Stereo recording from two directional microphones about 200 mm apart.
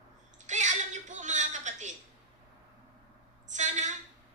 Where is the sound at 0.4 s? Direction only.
35° right (ahead or behind).